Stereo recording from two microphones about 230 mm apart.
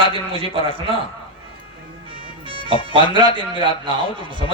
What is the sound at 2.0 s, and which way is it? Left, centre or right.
A man's voice, right.